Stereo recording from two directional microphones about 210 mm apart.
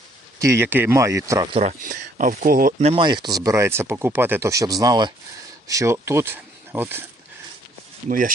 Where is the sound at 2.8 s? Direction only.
25° right (ahead or behind).